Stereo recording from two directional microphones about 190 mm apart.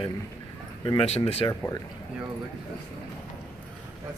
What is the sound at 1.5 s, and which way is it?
Speech, 15° left (ahead or behind).